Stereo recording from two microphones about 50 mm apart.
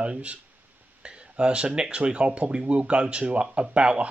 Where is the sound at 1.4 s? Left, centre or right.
Right.